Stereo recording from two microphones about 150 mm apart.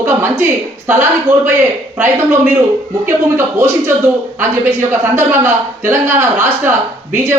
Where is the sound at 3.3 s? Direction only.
15° right (ahead or behind).